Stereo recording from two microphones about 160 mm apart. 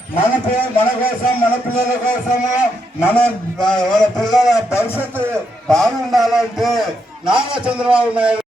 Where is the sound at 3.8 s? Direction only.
5° left (ahead or behind).